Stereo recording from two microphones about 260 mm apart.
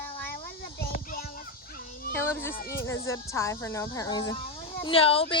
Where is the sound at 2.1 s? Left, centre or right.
Centre.